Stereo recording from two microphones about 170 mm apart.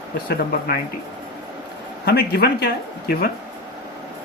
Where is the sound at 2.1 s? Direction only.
65° left (ahead or behind).